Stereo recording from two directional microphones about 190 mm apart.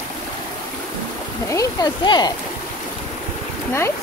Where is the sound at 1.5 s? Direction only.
20° left (ahead or behind).